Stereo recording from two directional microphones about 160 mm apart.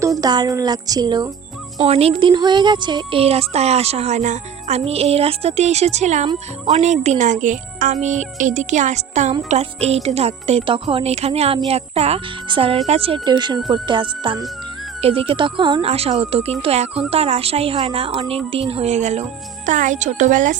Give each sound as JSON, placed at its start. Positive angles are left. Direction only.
{"t": 0.2, "sound": "speech", "side_deg": -25}
{"t": 1.8, "sound": "a child's voice", "side_deg": -40}